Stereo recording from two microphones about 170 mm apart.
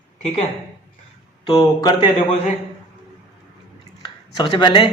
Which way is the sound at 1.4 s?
25° left (ahead or behind).